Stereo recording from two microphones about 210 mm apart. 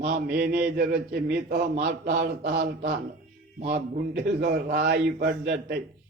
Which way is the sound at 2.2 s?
55° right (ahead or behind).